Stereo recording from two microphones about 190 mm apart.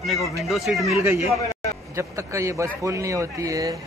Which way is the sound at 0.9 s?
15° right (ahead or behind).